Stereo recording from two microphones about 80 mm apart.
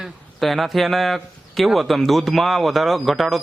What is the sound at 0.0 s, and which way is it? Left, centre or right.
A man's voice, centre.